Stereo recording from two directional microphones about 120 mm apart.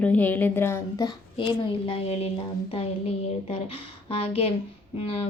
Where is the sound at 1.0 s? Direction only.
45° left (ahead or behind).